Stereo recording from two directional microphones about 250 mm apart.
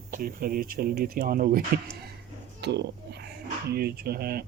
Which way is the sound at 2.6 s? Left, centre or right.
Right.